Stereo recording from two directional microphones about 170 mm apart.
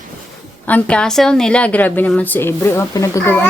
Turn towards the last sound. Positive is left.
turn(degrees=15)  # may be behind; listen again after turning